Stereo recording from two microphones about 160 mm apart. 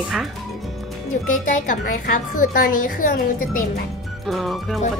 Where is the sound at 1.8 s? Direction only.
60° left (ahead or behind).